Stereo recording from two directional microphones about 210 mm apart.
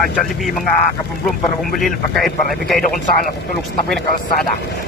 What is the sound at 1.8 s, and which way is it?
Speech, centre (ahead or behind).